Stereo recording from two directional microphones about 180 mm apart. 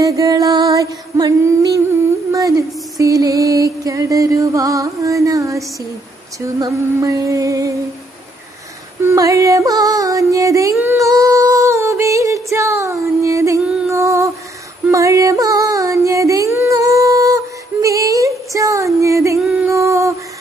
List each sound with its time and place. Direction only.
0.0 s music: 20° right (ahead or behind)
9.0 s music: 15° right (ahead or behind)
10.7 s a sound: 10° right (ahead or behind)
13.7 s music: 15° right (ahead or behind)
17.8 s female singing: 20° right (ahead or behind)